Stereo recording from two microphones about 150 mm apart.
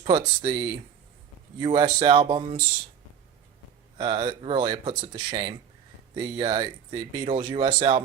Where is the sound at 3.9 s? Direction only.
30° right (ahead or behind).